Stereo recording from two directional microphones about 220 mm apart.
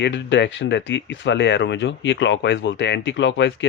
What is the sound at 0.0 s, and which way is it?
Speech, 55° left (ahead or behind).